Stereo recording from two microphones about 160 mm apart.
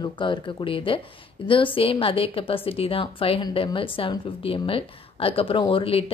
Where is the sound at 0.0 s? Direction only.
30° left (ahead or behind).